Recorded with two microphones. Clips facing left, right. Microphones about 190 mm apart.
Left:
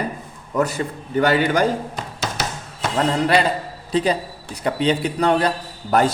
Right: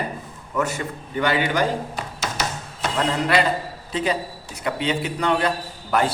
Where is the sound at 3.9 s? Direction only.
35° left (ahead or behind).